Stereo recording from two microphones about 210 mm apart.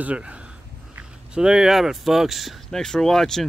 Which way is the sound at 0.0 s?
5° right (ahead or behind).